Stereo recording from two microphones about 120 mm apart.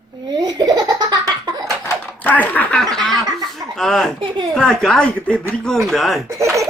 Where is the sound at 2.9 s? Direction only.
5° left (ahead or behind).